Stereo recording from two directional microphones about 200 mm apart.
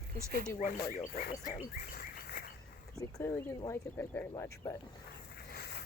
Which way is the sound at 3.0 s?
15° left (ahead or behind).